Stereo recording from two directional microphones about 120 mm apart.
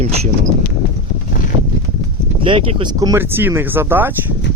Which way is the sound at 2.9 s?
30° right (ahead or behind).